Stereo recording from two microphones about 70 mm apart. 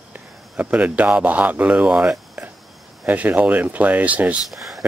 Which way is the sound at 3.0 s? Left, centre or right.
Right.